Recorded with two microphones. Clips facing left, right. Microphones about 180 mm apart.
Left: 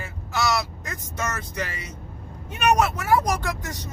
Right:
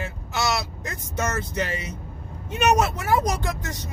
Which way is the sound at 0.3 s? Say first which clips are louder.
Left 2 dB; 20° right (ahead or behind).